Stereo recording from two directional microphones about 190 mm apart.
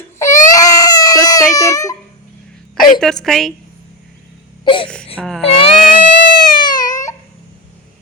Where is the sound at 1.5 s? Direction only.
15° left (ahead or behind).